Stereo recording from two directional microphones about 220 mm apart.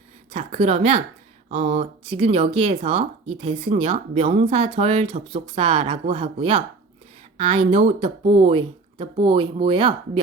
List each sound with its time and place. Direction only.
0.3 s speech: 25° right (ahead or behind)